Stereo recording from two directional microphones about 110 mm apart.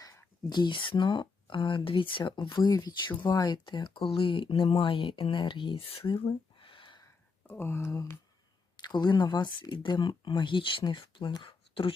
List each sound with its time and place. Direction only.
0.0 s a sound: 25° left (ahead or behind)
0.5 s speech: 45° left (ahead or behind)
7.4 s speech: 20° left (ahead or behind)
8.7 s speech: 40° left (ahead or behind)